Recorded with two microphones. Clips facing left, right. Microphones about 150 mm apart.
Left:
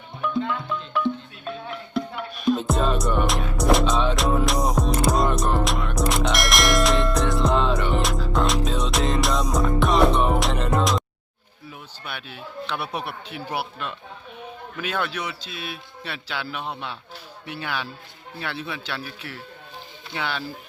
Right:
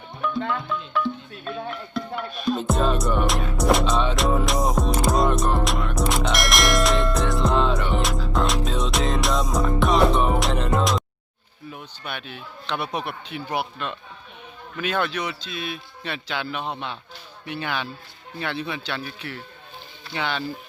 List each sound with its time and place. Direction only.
0.7 s music: 15° left (ahead or behind)
2.4 s music: centre (ahead or behind)
11.7 s a man's voice: 5° left (ahead or behind)